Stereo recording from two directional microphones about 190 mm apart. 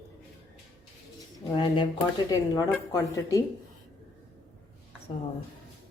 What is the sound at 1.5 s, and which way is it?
A woman's voice, 25° left (ahead or behind).